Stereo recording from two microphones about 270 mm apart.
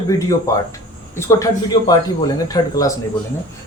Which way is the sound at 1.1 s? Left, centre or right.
Centre.